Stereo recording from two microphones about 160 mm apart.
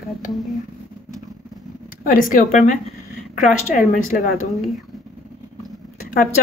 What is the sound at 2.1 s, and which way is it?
Speech, 60° left (ahead or behind).